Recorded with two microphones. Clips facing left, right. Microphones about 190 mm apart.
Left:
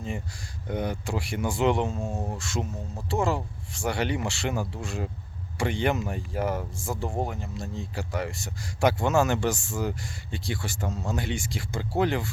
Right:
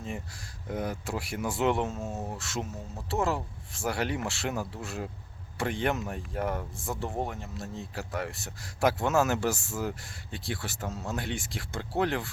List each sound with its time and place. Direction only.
0.7 s speech: centre (ahead or behind)